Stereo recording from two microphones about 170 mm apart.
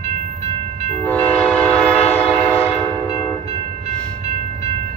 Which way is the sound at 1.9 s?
35° left (ahead or behind).